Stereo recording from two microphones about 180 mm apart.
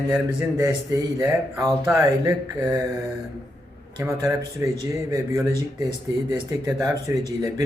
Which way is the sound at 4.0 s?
15° right (ahead or behind).